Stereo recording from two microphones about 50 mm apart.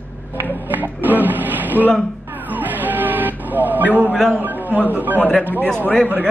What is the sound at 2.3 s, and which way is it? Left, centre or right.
Music, right.